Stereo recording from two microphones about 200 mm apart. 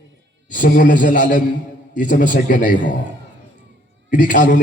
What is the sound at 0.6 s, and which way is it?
A man's voice, 45° left (ahead or behind).